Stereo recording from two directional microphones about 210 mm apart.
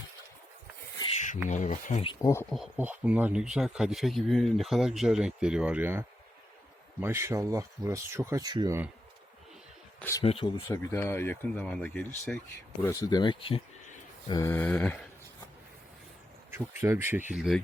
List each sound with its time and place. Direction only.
1.5 s speech: 35° left (ahead or behind)
2.0 s speech: 15° left (ahead or behind)
2.5 s speech: 5° right (ahead or behind)
10.0 s speech: 15° left (ahead or behind)
10.2 s speech: 25° left (ahead or behind)
10.7 s speech: 15° left (ahead or behind)
16.5 s speech: 10° right (ahead or behind)
17.3 s speech: centre (ahead or behind)